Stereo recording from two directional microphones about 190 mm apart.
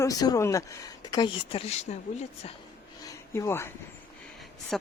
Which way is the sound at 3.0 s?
15° left (ahead or behind).